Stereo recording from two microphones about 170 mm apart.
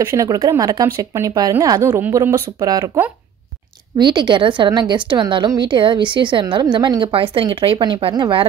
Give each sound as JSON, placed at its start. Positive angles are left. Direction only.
{"t": 0.0, "sound": "a woman's voice", "side_deg": -20}
{"t": 4.0, "sound": "a woman's voice", "side_deg": -25}